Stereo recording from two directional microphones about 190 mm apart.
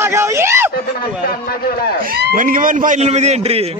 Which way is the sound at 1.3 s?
55° left (ahead or behind).